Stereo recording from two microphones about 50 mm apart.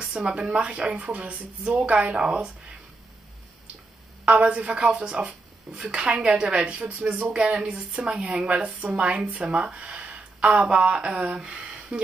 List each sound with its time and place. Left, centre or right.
0.1 s speech: centre
2.1 s speech: centre
4.5 s speech: right
4.9 s a woman's voice: centre
7.7 s a woman's voice: centre
11.4 s a sound: centre